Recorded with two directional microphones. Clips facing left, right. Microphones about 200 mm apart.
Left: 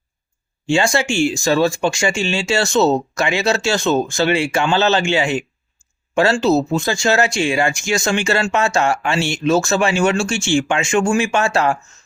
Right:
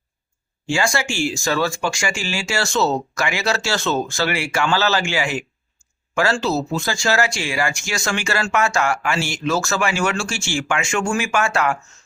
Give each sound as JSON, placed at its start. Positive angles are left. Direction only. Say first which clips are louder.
{"t": 0.9, "sound": "speech", "louder": "left 5 dB", "side_deg": 20}